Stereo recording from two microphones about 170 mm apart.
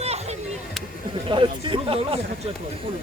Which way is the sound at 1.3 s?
30° right (ahead or behind).